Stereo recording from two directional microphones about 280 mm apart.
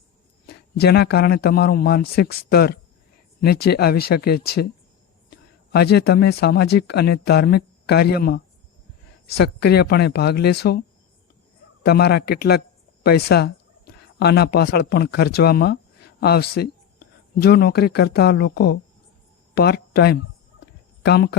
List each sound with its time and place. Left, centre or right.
0.4 s speech: left
5.7 s speech: left